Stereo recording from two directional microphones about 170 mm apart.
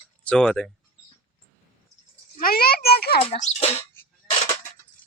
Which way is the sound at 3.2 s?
35° left (ahead or behind).